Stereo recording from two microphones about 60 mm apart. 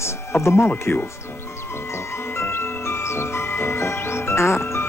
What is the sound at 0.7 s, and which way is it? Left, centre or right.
Speech, left.